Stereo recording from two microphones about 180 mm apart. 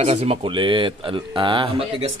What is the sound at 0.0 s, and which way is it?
Speech, 35° right (ahead or behind).